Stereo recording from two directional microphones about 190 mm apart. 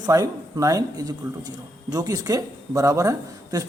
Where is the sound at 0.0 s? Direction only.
20° right (ahead or behind).